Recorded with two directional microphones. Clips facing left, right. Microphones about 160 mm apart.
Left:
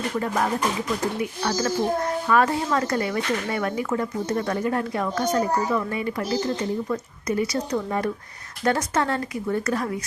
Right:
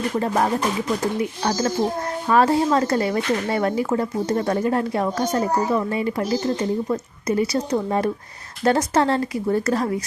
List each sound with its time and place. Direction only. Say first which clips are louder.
2.3 s speech: right 5 dB; 30° right (ahead or behind)